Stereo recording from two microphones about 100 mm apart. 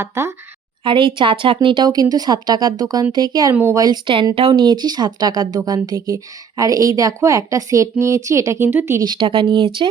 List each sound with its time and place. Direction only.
0.0 s a woman's voice: 25° right (ahead or behind)
0.9 s a woman's voice: 55° right (ahead or behind); by 3.5 s 40° right (ahead or behind)
3.5 s a woman's voice: 20° right (ahead or behind)
3.8 s a woman's voice: 45° right (ahead or behind); by 9.0 s 30° right (ahead or behind)
9.0 s a woman's voice: 55° right (ahead or behind)